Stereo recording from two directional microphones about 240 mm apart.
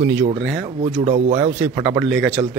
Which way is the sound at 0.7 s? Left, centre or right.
Right.